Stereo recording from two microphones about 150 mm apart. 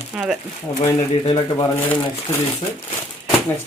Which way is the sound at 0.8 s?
30° left (ahead or behind).